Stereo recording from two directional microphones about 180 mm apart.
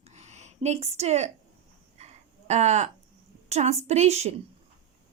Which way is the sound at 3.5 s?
40° right (ahead or behind).